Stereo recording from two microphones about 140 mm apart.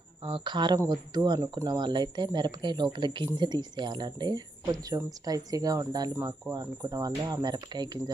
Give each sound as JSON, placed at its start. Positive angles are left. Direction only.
{"t": 0.3, "sound": "speech", "side_deg": -35}